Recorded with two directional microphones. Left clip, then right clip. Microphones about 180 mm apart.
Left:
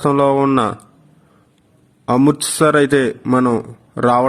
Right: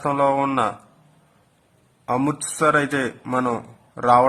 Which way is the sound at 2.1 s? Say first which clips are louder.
Left 8 dB; 25° left (ahead or behind).